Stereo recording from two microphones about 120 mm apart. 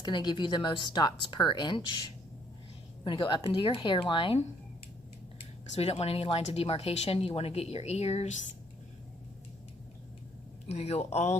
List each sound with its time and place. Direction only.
0.0 s speech: 35° left (ahead or behind)
5.7 s speech: 60° left (ahead or behind)
10.7 s speech: 60° left (ahead or behind)